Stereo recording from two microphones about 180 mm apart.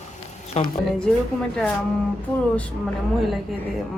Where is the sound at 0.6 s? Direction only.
40° left (ahead or behind).